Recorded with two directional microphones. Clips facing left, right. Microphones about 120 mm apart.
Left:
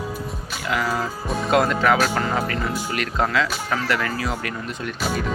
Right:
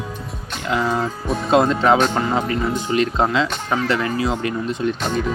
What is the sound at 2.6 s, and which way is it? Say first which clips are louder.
Speech: right 4 dB; 10° left (ahead or behind).